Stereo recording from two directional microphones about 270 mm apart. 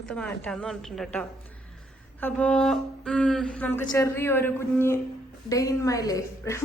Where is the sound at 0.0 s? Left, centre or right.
Centre.